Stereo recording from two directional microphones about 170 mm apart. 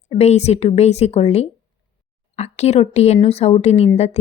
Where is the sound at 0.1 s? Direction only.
40° left (ahead or behind).